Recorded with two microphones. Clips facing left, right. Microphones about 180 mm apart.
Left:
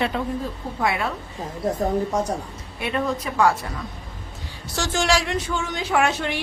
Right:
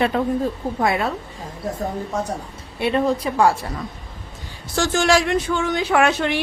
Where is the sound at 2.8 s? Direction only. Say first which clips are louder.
Right 5 dB; 30° right (ahead or behind).